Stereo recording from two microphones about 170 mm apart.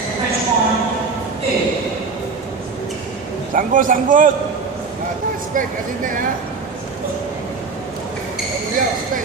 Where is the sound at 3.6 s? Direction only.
55° right (ahead or behind).